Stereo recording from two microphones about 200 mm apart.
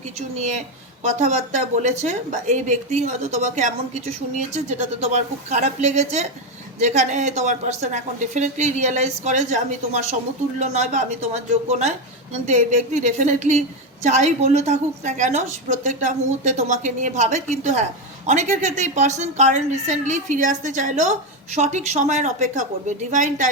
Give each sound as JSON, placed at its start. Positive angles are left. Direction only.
{"t": 1.0, "sound": "a woman's voice", "side_deg": -35}